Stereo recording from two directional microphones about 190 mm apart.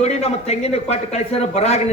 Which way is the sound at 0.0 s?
35° left (ahead or behind).